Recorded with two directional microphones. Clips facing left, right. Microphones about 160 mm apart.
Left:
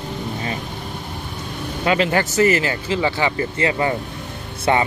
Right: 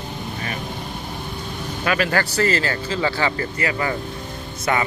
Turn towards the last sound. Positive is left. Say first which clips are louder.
# left 4 dB
turn(degrees=25)  # may be behind; listen again after turning